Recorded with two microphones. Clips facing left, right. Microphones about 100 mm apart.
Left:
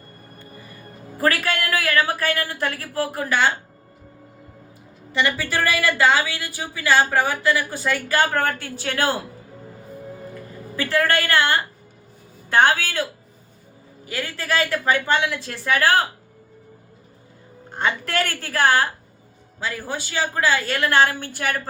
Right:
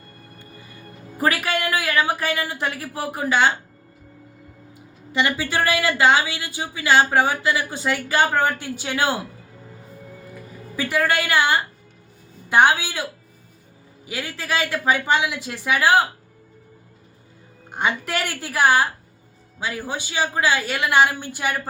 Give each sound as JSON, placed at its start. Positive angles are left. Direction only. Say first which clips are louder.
{"t": 1.2, "sound": "a man's voice", "louder": "even", "side_deg": -15}
{"t": 5.1, "sound": "a woman's voice", "louder": "right 1 dB", "side_deg": -20}
{"t": 10.8, "sound": "a man's voice", "louder": "left 1 dB", "side_deg": -15}
{"t": 17.7, "sound": "a man's voice", "louder": "right 1 dB", "side_deg": -15}